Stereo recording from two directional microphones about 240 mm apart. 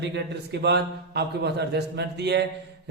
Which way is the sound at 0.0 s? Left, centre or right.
Right.